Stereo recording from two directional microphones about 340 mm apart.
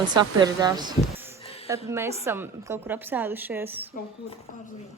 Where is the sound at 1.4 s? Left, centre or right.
Centre.